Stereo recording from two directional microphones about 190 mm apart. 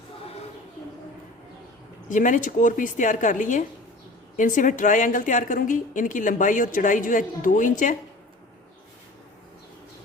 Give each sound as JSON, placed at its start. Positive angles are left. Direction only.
{"t": 2.0, "sound": "speech", "side_deg": 40}